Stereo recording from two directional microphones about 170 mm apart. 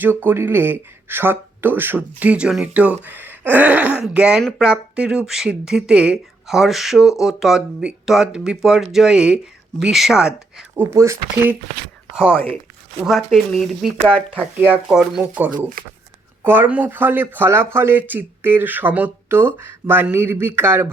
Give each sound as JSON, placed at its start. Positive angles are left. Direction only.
{"t": 0.0, "sound": "speech", "side_deg": -10}
{"t": 10.9, "sound": "speech", "side_deg": -15}
{"t": 13.1, "sound": "speech", "side_deg": 0}
{"t": 15.8, "sound": "speech", "side_deg": -55}
{"t": 16.4, "sound": "speech", "side_deg": -10}